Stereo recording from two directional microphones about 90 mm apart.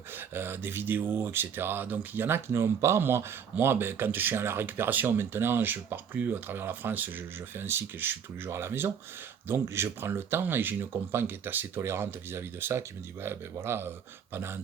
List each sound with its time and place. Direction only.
0.1 s speech: 25° right (ahead or behind)